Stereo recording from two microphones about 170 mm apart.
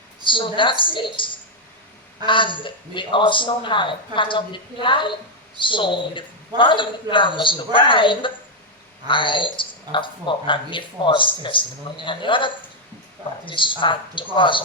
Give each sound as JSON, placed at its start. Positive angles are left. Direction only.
{"t": 0.3, "sound": "speech", "side_deg": 30}